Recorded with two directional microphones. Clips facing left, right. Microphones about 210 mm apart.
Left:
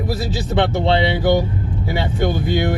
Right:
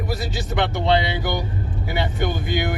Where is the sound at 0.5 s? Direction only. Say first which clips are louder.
Left 5 dB; 30° left (ahead or behind).